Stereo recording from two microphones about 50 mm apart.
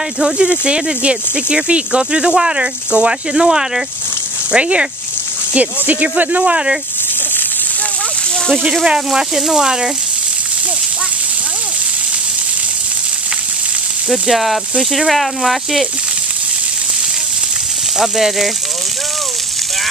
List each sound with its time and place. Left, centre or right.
0.2 s speech: centre
4.5 s speech: right
8.8 s speech: centre
14.0 s speech: centre
17.9 s speech: centre